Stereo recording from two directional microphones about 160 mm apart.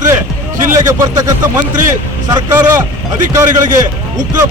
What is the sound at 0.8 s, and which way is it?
Speech, 20° right (ahead or behind).